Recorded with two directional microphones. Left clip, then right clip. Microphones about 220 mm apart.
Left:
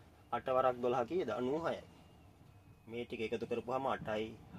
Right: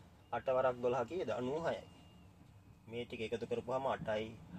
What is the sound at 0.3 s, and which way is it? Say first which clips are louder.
Speech: left 1 dB; 45° left (ahead or behind).